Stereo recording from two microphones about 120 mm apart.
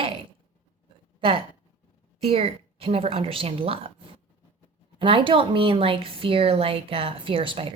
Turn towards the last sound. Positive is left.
turn(degrees=-45)  # may be behind; listen again after turning